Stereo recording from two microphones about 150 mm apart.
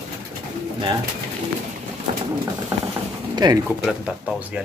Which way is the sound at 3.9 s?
5° right (ahead or behind).